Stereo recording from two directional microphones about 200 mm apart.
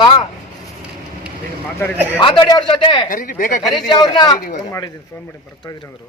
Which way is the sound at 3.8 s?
20° left (ahead or behind).